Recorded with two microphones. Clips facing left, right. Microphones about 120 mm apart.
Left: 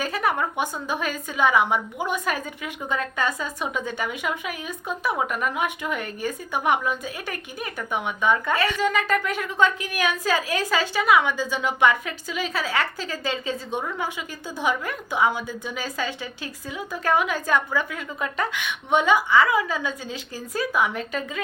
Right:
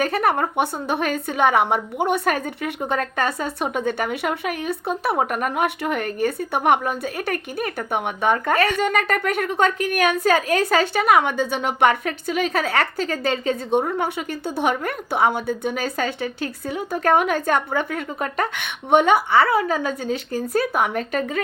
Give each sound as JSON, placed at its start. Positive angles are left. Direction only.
{"t": 0.0, "sound": "a sound", "side_deg": -55}
{"t": 0.3, "sound": "a woman's voice", "side_deg": -40}
{"t": 0.5, "sound": "a woman's voice", "side_deg": -60}
{"t": 2.9, "sound": "a woman's voice", "side_deg": -45}
{"t": 8.7, "sound": "a woman's voice", "side_deg": -55}
{"t": 13.7, "sound": "a woman's voice", "side_deg": -35}
{"t": 14.0, "sound": "a woman's voice", "side_deg": -60}
{"t": 15.1, "sound": "a woman's voice", "side_deg": -40}
{"t": 15.4, "sound": "a woman's voice", "side_deg": -60}
{"t": 19.4, "sound": "a woman's voice", "side_deg": -35}
{"t": 19.6, "sound": "a woman's voice", "side_deg": -45}
{"t": 19.9, "sound": "a woman's voice", "side_deg": -65}
{"t": 20.6, "sound": "a woman's voice", "side_deg": -45}